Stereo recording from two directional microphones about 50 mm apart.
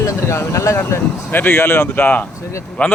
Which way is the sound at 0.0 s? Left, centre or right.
Left.